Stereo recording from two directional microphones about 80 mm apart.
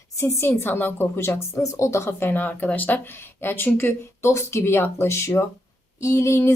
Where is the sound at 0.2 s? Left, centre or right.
Left.